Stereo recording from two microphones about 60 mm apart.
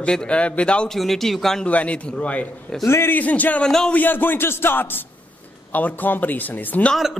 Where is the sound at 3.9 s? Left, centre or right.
Left.